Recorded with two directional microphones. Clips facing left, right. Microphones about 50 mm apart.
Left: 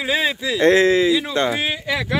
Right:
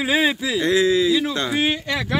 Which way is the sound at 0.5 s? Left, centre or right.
Left.